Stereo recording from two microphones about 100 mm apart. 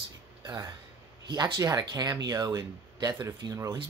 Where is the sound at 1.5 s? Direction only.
35° right (ahead or behind).